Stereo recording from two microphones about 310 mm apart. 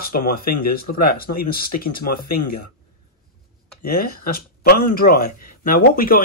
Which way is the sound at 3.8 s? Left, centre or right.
Left.